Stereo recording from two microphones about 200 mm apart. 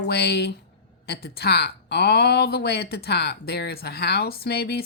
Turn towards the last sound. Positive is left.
turn(degrees=50)  # may be behind; listen again after turning